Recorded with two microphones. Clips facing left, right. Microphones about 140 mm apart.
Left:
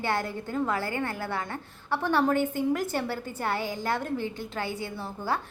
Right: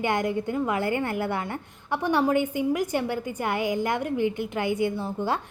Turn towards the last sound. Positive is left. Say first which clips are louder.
# right 4 dB
turn(degrees=-20)  # may be behind; listen again after turning